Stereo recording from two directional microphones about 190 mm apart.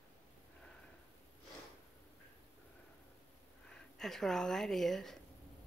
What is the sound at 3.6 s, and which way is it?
Speech, centre (ahead or behind).